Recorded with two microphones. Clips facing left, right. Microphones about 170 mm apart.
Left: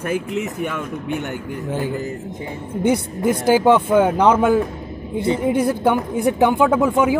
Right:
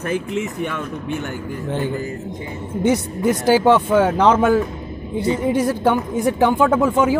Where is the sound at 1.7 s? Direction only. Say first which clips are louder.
Right 1 dB; 10° left (ahead or behind).